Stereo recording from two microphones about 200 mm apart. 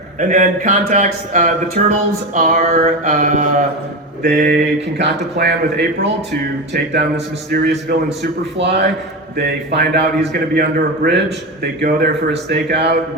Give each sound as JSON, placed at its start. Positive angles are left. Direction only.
{"t": 0.2, "sound": "speech", "side_deg": -40}
{"t": 4.2, "sound": "speech", "side_deg": -55}
{"t": 7.5, "sound": "a man's voice", "side_deg": -50}